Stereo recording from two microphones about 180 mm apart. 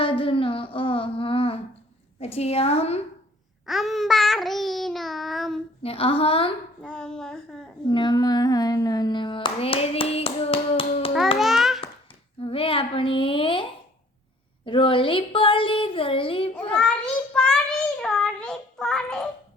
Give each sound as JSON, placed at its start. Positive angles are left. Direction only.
{"t": 0.0, "sound": "humming", "side_deg": 30}
{"t": 2.1, "sound": "a woman's voice", "side_deg": 35}
{"t": 3.7, "sound": "babbling", "side_deg": 0}
{"t": 5.8, "sound": "a woman's voice", "side_deg": 30}
{"t": 6.8, "sound": "babbling", "side_deg": 5}
{"t": 7.9, "sound": "hands", "side_deg": 25}
{"t": 11.3, "sound": "babbling", "side_deg": 0}
{"t": 12.4, "sound": "child singing", "side_deg": 30}
{"t": 17.3, "sound": "child singing", "side_deg": 5}